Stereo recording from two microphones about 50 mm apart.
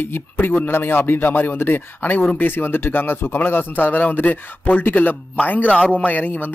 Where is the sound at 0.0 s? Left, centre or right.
Left.